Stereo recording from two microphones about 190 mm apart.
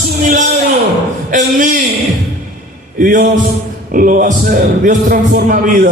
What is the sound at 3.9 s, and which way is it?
Music, 45° right (ahead or behind).